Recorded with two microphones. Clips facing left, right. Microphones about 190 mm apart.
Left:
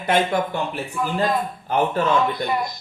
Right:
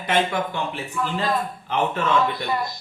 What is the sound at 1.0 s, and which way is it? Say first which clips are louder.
Speech: left 1 dB; 15° left (ahead or behind).